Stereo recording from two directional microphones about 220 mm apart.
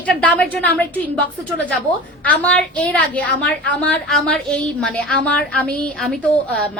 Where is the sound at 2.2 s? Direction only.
5° left (ahead or behind).